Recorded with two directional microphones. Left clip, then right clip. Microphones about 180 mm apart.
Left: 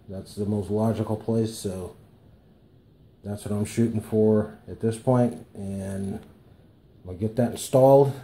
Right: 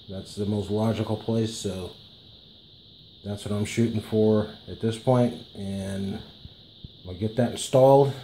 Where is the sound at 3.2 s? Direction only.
Centre (ahead or behind).